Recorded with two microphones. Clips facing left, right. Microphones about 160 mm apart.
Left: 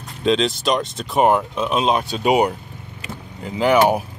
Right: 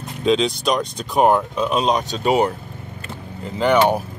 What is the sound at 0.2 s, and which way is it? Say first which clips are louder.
Speech: even; centre (ahead or behind).